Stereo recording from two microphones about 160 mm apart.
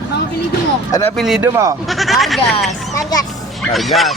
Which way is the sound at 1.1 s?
Centre (ahead or behind).